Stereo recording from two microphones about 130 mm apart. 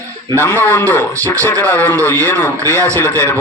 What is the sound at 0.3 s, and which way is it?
A man's voice, 15° left (ahead or behind).